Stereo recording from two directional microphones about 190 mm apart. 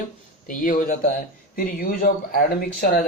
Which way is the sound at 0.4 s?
45° left (ahead or behind).